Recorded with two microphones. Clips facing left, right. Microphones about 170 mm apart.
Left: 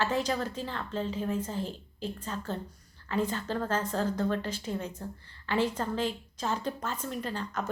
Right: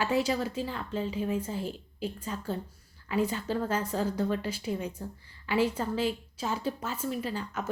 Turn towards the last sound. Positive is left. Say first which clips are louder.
# even
turn(degrees=-5)  # may be behind; listen again after turning